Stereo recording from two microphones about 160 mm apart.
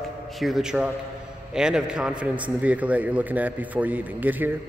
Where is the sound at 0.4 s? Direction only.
Centre (ahead or behind).